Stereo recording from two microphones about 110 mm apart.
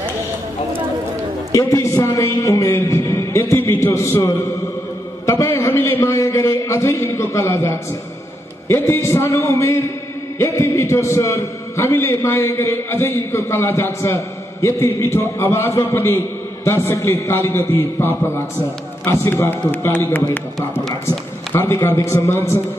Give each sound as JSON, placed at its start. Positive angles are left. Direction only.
{"t": 1.5, "sound": "a man's voice", "side_deg": 30}
{"t": 21.5, "sound": "a man's voice", "side_deg": 25}